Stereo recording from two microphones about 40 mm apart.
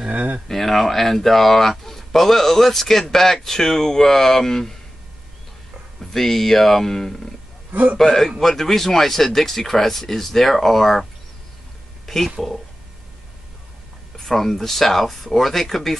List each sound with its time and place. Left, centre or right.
0.1 s a sound: right
0.5 s speech: centre
5.9 s speech: centre
7.7 s a man's voice: right
8.0 s speech: centre
12.1 s speech: centre
14.1 s speech: centre